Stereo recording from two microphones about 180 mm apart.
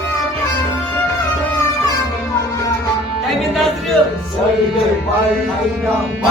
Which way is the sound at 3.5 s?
Centre (ahead or behind).